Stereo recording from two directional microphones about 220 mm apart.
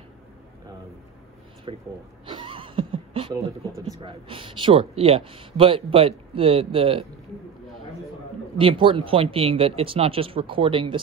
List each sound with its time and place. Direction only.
1.7 s speech: 25° right (ahead or behind)
2.2 s a sound: 20° right (ahead or behind)
4.0 s speech: 25° right (ahead or behind)
8.5 s speech: 25° right (ahead or behind)